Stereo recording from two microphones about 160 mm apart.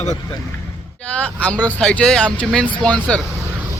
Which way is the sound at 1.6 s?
10° left (ahead or behind).